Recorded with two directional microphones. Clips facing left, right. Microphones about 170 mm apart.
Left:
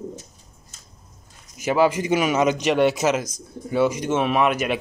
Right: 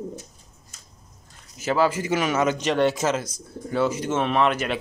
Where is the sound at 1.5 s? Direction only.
15° left (ahead or behind).